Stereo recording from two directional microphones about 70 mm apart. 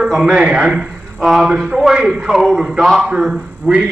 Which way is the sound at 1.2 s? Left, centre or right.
Centre.